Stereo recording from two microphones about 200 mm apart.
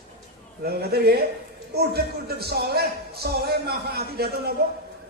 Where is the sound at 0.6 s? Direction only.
50° right (ahead or behind).